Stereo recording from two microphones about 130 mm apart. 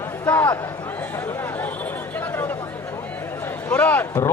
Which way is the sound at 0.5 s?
20° left (ahead or behind).